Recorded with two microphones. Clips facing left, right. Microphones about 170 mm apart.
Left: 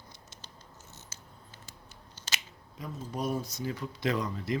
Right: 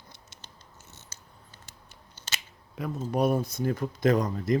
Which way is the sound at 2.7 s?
65° right (ahead or behind).